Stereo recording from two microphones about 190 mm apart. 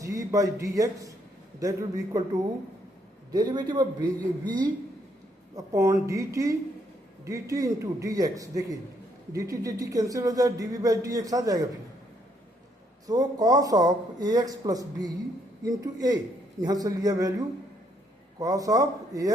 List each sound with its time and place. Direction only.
0.0 s a man's voice: 15° right (ahead or behind)
3.3 s speech: 20° right (ahead or behind)
13.1 s speech: 20° right (ahead or behind)